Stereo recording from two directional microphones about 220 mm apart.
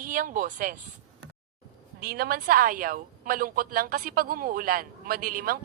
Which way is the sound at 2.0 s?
45° right (ahead or behind).